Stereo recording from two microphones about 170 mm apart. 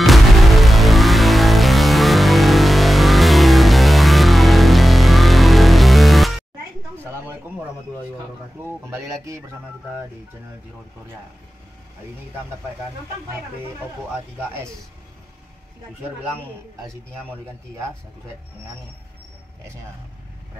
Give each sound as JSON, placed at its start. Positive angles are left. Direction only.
{"t": 0.0, "sound": "music", "side_deg": 0}
{"t": 16.8, "sound": "a man's voice", "side_deg": -15}